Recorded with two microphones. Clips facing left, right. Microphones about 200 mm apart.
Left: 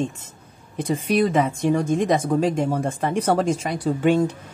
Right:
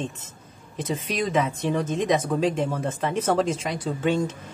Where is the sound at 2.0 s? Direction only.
50° left (ahead or behind).